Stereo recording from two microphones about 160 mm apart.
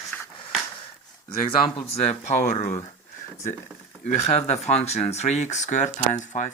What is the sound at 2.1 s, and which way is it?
Speech, 45° left (ahead or behind).